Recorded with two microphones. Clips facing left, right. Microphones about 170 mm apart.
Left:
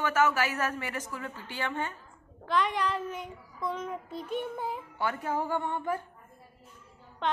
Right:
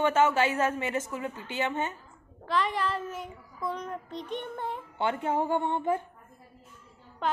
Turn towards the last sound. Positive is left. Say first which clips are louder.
# right 1 dB
turn(degrees=-5)  # may be behind; listen again after turning